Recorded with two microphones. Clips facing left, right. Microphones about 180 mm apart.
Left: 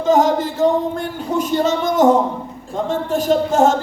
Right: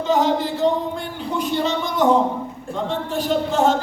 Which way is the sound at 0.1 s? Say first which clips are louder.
Left 4 dB; 45° left (ahead or behind).